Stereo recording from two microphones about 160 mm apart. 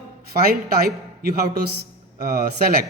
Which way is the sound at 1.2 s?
75° right (ahead or behind).